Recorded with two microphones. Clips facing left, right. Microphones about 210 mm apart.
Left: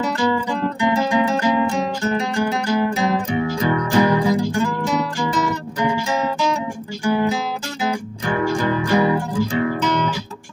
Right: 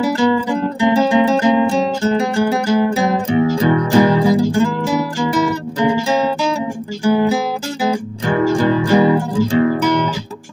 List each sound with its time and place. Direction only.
0.3 s guitar: 30° right (ahead or behind)
5.3 s music: 30° right (ahead or behind)